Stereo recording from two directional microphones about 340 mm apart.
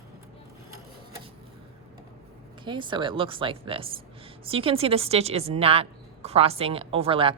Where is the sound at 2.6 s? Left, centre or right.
Centre.